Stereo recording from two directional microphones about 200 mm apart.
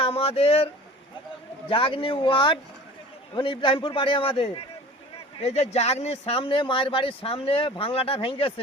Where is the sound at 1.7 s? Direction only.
25° left (ahead or behind).